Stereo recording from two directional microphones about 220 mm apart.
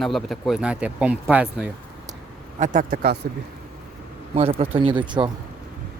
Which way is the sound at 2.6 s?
35° right (ahead or behind).